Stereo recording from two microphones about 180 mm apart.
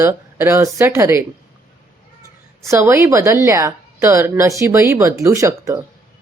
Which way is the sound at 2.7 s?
15° right (ahead or behind).